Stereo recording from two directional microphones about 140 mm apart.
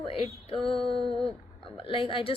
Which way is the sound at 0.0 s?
40° left (ahead or behind).